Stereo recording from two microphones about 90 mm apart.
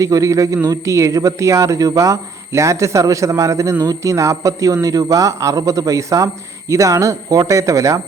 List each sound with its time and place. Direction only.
0.0 s a man's voice: 40° right (ahead or behind)